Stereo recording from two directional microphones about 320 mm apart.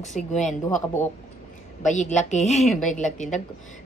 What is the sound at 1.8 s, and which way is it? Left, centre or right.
Speech, left.